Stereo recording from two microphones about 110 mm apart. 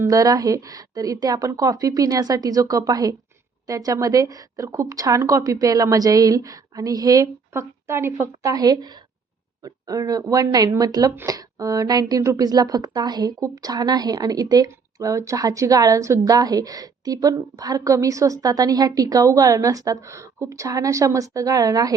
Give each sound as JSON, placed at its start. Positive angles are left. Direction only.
{"t": 0.0, "sound": "speech", "side_deg": -30}
{"t": 8.4, "sound": "speech", "side_deg": -35}